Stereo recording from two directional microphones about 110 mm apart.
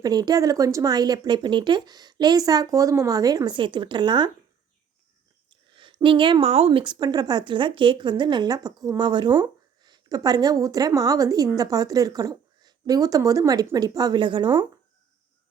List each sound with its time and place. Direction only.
0.0 s speech: 35° right (ahead or behind)
5.5 s a sound: 50° right (ahead or behind)
6.5 s speech: 65° right (ahead or behind); by 14.7 s 45° right (ahead or behind)